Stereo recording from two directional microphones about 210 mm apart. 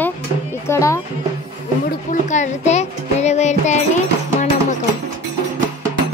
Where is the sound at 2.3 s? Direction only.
35° left (ahead or behind).